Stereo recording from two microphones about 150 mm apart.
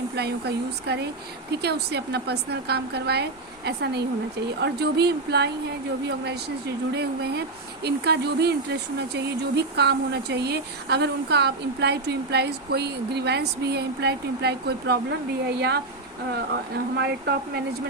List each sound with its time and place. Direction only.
0.2 s speech: 90° right